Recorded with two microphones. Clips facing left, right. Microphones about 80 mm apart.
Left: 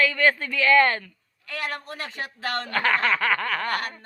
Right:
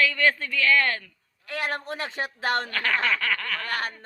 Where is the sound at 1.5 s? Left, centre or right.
Right.